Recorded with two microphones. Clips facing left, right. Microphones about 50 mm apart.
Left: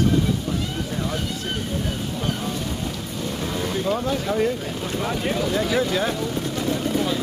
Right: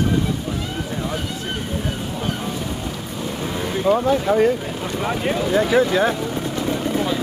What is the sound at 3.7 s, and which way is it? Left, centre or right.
Speech, centre.